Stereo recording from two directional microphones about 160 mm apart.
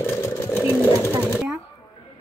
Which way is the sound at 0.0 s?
15° left (ahead or behind).